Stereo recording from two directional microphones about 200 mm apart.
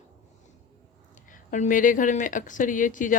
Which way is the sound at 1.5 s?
40° left (ahead or behind).